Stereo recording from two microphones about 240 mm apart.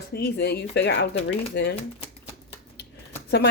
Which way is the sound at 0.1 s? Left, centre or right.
Left.